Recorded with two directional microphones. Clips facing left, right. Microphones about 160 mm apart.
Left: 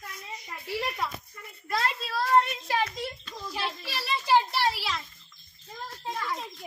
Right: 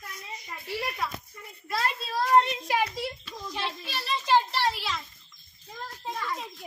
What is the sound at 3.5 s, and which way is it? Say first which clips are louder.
A child's voice: even; 5° left (ahead or behind).